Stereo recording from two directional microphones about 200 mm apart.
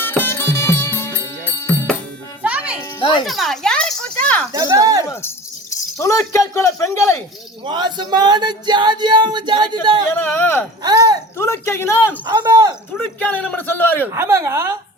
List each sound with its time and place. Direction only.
0.0 s music: 10° left (ahead or behind)
2.4 s music: 5° right (ahead or behind)
3.2 s a sound: centre (ahead or behind)
4.5 s speech: 15° right (ahead or behind)
5.7 s music: 15° left (ahead or behind)
6.5 s a man's voice: 15° left (ahead or behind)
7.6 s a sound: 20° right (ahead or behind)
10.2 s a man's voice: 10° left (ahead or behind)
10.8 s a sound: 20° right (ahead or behind)
11.3 s a man's voice: 10° left (ahead or behind)
12.2 s a sound: 20° right (ahead or behind)
13.3 s a man's voice: 10° left (ahead or behind)
14.1 s speech: 15° right (ahead or behind)